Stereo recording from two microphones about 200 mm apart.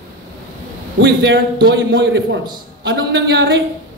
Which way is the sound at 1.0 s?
60° right (ahead or behind).